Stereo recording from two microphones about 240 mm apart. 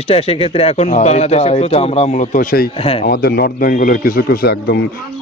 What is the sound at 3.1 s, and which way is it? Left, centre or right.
A man's voice, left.